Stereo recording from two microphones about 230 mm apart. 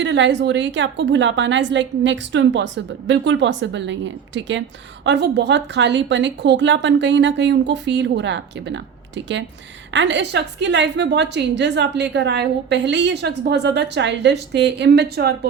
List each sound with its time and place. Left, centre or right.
0.0 s a woman's voice: right